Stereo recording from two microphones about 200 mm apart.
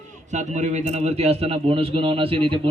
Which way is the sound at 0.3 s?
35° right (ahead or behind).